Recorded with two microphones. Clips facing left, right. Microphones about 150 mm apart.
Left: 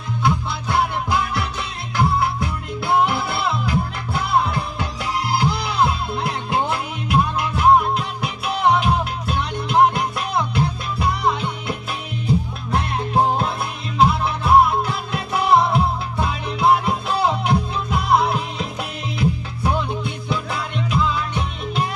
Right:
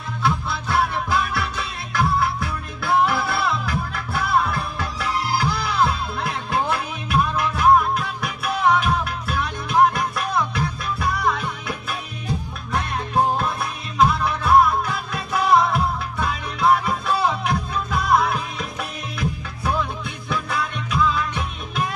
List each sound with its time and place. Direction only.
0.2 s music: 20° left (ahead or behind)
12.7 s music: 25° left (ahead or behind)